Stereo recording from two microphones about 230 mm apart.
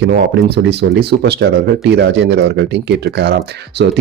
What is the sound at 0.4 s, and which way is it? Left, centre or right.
Speech, right.